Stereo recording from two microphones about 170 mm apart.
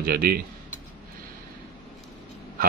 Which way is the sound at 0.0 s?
60° right (ahead or behind).